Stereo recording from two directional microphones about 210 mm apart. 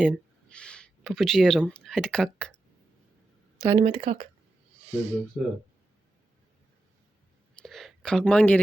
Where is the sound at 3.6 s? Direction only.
25° right (ahead or behind).